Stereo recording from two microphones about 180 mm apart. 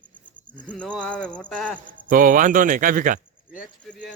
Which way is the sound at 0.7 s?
5° left (ahead or behind).